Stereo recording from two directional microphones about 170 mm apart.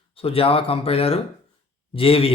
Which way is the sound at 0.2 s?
35° left (ahead or behind).